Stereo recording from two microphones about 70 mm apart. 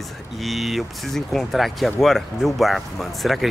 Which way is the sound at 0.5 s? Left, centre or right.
Centre.